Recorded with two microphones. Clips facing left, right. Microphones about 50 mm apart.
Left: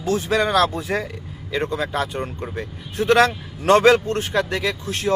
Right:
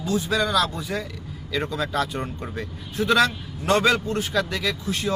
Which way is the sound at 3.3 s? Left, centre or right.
Left.